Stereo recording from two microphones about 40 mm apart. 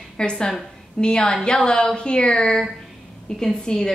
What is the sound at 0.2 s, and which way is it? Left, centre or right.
A woman's voice, left.